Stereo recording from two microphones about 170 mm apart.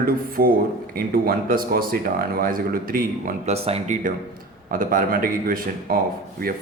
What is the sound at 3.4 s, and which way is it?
Speech, 35° right (ahead or behind).